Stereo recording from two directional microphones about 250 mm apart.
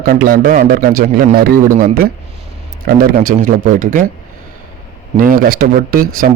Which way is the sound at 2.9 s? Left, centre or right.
Right.